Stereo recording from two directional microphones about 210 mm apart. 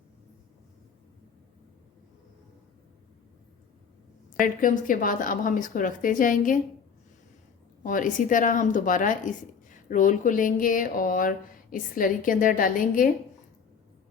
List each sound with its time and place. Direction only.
4.4 s speech: 40° left (ahead or behind)
7.9 s speech: 40° left (ahead or behind)